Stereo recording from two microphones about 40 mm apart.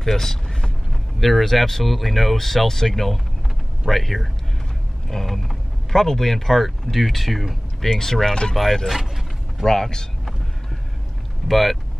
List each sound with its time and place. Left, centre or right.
0.0 s speech: centre
8.9 s vehicle: centre
9.7 s speech: centre
11.4 s speech: centre